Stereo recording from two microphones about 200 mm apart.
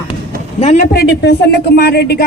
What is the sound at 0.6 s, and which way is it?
A woman's voice, 40° left (ahead or behind).